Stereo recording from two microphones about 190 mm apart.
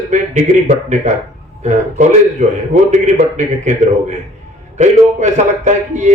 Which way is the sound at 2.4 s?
40° right (ahead or behind).